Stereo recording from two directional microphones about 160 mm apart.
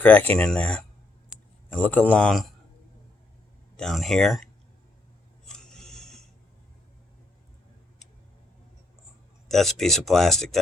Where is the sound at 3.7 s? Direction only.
Centre (ahead or behind).